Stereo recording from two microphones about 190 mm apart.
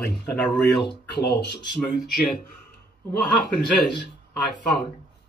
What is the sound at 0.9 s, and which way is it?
Speech, 60° left (ahead or behind).